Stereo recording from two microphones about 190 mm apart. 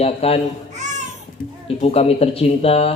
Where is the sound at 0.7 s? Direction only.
40° right (ahead or behind).